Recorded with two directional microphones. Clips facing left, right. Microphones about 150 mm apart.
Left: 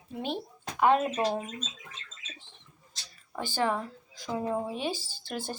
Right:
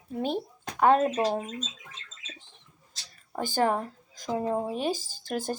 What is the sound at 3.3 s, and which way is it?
Speech, 45° right (ahead or behind).